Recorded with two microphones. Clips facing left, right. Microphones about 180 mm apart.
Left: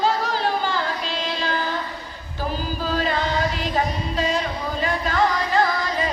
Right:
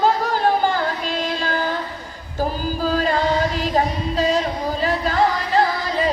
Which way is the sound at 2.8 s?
40° right (ahead or behind).